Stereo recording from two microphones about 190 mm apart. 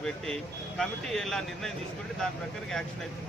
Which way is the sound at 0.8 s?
Centre (ahead or behind).